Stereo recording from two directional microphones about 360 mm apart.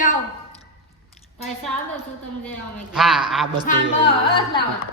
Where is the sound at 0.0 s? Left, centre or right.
Left.